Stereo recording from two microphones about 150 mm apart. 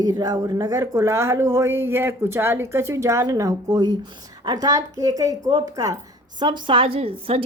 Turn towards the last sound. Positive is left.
turn(degrees=-40)  # may be behind; listen again after turning